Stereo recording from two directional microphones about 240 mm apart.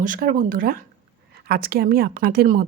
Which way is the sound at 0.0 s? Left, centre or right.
Right.